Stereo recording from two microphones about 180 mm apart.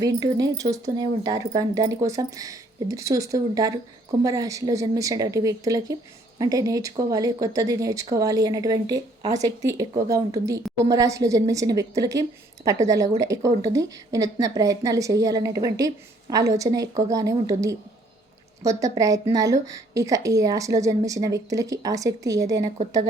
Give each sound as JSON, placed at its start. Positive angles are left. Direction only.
{"t": 0.0, "sound": "a woman's voice", "side_deg": -20}
{"t": 18.6, "sound": "a woman's voice", "side_deg": -15}